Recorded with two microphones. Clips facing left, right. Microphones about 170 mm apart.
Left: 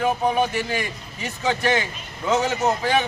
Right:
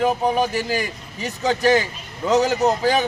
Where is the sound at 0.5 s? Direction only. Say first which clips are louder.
Right 2 dB; 40° right (ahead or behind).